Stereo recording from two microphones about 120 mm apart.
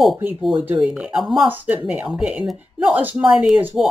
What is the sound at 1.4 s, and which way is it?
Speech, 15° right (ahead or behind).